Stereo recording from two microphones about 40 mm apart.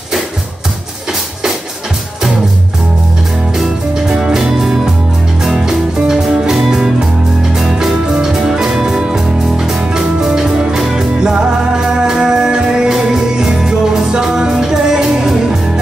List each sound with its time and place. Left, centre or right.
3.5 s music: centre
11.1 s music: centre